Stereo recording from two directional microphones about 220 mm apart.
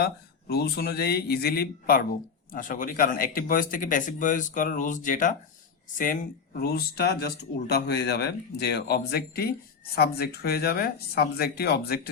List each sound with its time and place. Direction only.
0.0 s speech: 45° left (ahead or behind)